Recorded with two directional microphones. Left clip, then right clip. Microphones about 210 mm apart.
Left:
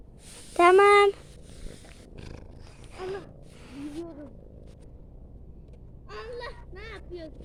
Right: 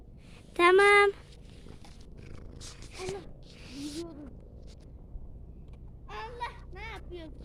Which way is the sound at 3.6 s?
5° right (ahead or behind).